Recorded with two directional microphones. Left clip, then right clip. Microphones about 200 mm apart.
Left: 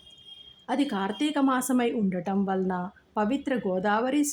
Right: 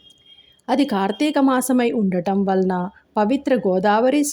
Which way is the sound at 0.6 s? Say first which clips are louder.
Right 9 dB; 25° right (ahead or behind).